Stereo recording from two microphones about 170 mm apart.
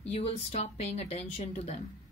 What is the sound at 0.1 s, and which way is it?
Speech, 40° left (ahead or behind).